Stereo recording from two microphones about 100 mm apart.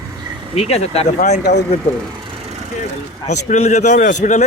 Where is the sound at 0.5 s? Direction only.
90° left.